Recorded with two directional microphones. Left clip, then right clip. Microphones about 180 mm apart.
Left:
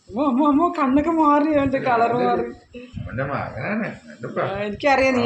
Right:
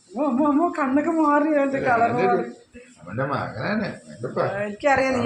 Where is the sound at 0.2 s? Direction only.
25° left (ahead or behind).